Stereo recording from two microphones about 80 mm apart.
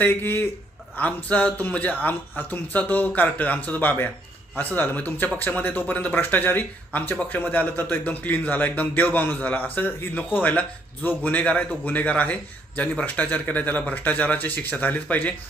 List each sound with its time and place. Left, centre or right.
0.0 s speech: left